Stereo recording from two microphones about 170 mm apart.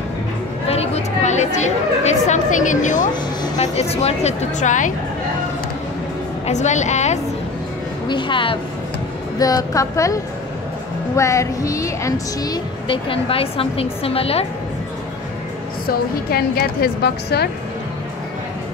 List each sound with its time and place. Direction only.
0.7 s a woman's voice: 40° left (ahead or behind)
6.4 s a woman's voice: 45° left (ahead or behind)
8.1 s a woman's voice: 30° left (ahead or behind)
15.9 s a woman's voice: 65° left (ahead or behind)